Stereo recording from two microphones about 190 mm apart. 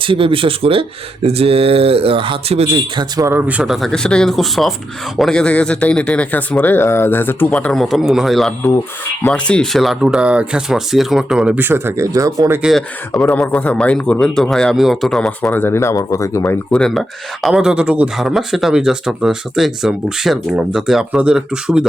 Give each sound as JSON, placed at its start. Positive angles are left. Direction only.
{"t": 0.0, "sound": "a man's voice", "side_deg": -30}
{"t": 12.6, "sound": "a man's voice", "side_deg": 0}